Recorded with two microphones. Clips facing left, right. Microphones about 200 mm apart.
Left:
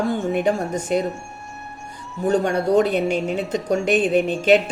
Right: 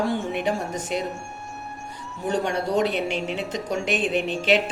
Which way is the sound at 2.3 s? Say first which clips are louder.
Left 6 dB; 50° left (ahead or behind).